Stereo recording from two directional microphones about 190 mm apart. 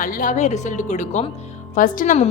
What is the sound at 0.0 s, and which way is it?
A woman's voice, 45° left (ahead or behind).